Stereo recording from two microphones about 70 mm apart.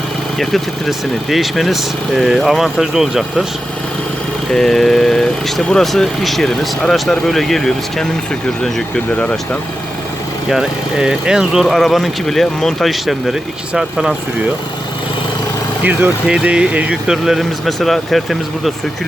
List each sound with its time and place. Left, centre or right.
0.3 s speech: centre
4.5 s speech: centre
10.5 s speech: centre
15.8 s speech: right; by 18.7 s centre